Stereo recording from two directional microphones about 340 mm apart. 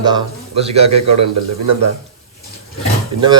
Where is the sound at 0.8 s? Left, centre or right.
Right.